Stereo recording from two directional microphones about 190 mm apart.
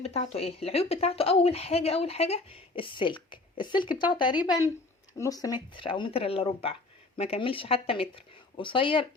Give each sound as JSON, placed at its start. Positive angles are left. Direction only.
{"t": 0.0, "sound": "speech", "side_deg": 35}